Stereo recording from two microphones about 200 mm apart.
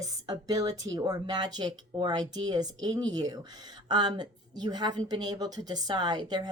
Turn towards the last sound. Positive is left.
turn(degrees=-20)  # may be behind; listen again after turning